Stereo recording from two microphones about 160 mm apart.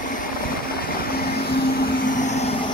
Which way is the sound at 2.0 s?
50° left (ahead or behind).